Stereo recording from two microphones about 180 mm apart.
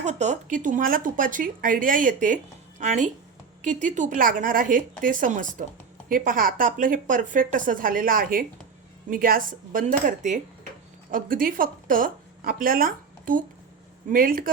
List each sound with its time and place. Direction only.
0.0 s a woman's voice: 40° right (ahead or behind)